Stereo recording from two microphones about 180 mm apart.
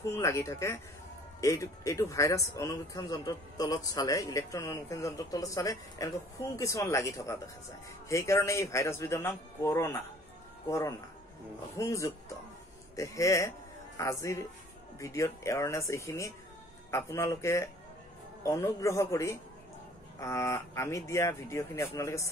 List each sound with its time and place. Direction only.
0.1 s speech: 15° left (ahead or behind)